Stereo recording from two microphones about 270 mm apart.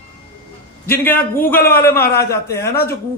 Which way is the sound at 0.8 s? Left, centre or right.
Centre.